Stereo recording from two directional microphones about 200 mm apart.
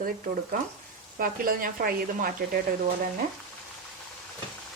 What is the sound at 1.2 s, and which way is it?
A woman's voice, 45° right (ahead or behind).